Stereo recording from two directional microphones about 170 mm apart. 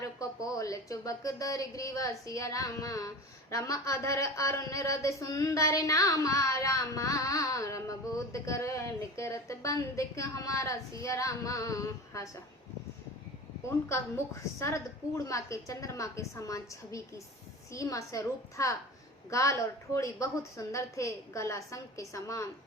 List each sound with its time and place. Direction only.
0.0 s a woman's voice: 20° left (ahead or behind)
13.7 s a woman's voice: 15° left (ahead or behind)